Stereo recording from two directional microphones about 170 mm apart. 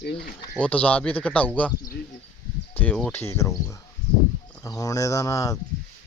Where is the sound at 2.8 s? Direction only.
5° left (ahead or behind).